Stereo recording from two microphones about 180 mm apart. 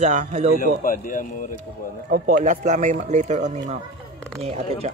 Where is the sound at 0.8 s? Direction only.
50° left (ahead or behind).